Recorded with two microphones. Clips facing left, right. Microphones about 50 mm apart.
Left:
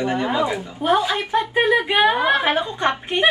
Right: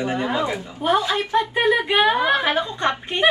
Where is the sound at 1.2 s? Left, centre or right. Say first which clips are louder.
Right 1 dB; centre.